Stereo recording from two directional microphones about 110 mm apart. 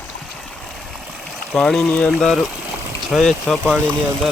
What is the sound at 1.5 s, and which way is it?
Speech, 5° left (ahead or behind).